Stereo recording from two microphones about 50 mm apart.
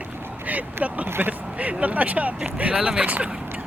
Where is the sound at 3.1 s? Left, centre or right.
Right.